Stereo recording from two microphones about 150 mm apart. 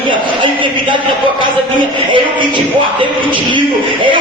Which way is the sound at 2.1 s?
35° right (ahead or behind).